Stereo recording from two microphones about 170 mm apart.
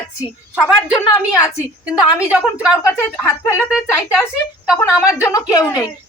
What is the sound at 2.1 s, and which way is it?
Speech, 5° right (ahead or behind).